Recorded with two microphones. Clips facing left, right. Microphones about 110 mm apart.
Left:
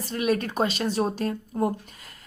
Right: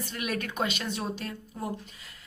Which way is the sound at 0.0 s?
35° left (ahead or behind).